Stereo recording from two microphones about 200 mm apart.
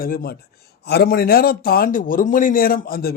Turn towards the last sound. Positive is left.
turn(degrees=50)  # may be behind; listen again after turning